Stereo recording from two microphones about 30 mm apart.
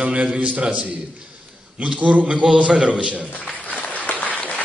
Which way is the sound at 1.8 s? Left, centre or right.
Right.